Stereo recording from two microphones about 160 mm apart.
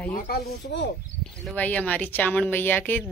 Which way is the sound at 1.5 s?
10° left (ahead or behind).